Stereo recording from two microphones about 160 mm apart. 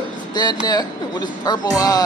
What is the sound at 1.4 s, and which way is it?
Speech, 25° left (ahead or behind).